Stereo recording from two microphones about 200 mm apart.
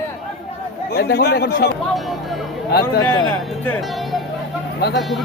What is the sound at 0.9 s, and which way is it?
Speech, 50° left (ahead or behind).